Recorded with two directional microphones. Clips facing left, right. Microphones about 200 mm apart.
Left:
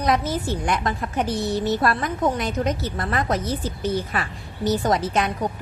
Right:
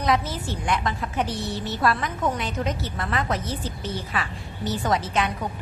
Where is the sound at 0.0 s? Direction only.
45° left (ahead or behind).